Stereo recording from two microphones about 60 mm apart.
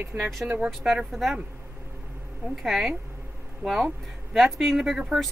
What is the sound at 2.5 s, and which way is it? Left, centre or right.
Speech, centre.